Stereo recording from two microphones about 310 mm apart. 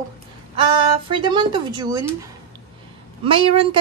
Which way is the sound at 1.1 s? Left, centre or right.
Centre.